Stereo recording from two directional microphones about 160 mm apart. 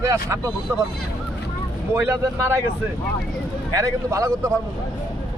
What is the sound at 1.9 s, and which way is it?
Speech, 15° right (ahead or behind).